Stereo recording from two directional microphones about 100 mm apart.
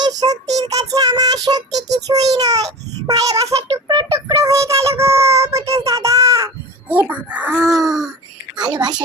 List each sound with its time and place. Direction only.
0.0 s child singing: 40° right (ahead or behind)
6.8 s baby cry: 15° right (ahead or behind)
7.6 s groan: centre (ahead or behind)
8.5 s a sound: 45° right (ahead or behind)